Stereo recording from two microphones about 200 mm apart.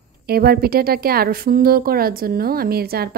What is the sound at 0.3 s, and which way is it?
A woman's voice, 50° right (ahead or behind).